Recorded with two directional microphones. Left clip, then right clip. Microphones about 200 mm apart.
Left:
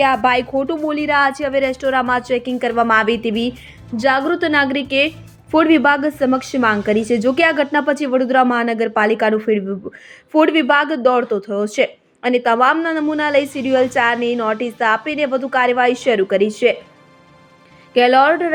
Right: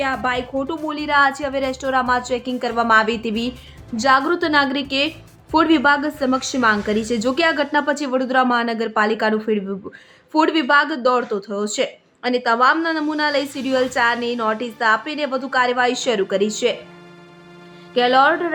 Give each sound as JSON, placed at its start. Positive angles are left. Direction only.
{"t": 0.0, "sound": "speech", "side_deg": 30}
{"t": 17.9, "sound": "speech", "side_deg": 15}